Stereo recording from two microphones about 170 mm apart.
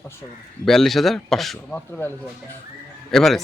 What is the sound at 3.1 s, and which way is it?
Speech, centre (ahead or behind).